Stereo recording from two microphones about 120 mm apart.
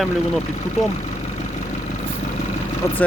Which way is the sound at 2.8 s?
25° left (ahead or behind).